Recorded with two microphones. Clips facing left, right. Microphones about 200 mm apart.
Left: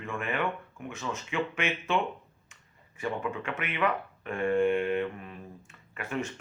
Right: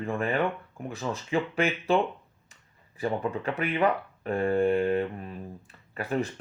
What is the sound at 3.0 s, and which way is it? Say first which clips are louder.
Speech: right 4 dB; 35° right (ahead or behind).